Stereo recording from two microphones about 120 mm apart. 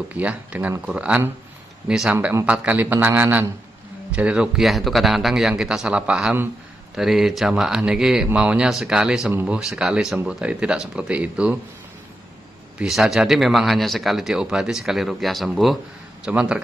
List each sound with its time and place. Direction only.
0.1 s speech: 10° right (ahead or behind)
9.3 s speech: 15° right (ahead or behind)
9.6 s speech: 5° right (ahead or behind)
12.7 s speech: 5° right (ahead or behind)